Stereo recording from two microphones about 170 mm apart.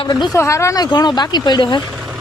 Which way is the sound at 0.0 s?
25° left (ahead or behind).